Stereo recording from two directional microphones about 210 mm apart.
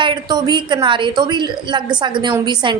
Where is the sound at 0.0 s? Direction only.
20° right (ahead or behind).